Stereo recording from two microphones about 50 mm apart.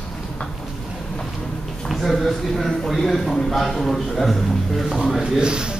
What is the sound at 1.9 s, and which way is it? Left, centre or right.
Speech, centre.